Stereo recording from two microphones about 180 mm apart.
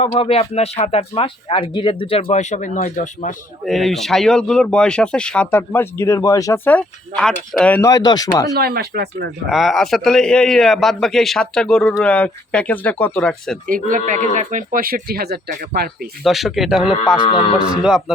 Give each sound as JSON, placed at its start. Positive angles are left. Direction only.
{"t": 0.0, "sound": "speech", "side_deg": 30}
{"t": 3.7, "sound": "speech", "side_deg": 0}
{"t": 8.5, "sound": "speech", "side_deg": -60}
{"t": 9.5, "sound": "a man's voice", "side_deg": 0}
{"t": 13.7, "sound": "speech", "side_deg": -50}
{"t": 16.2, "sound": "a man's voice", "side_deg": 0}
{"t": 17.2, "sound": "a man's voice", "side_deg": 30}
{"t": 17.7, "sound": "a man's voice", "side_deg": -5}